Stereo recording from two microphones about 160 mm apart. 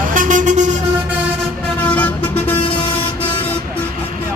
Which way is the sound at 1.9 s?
10° left (ahead or behind).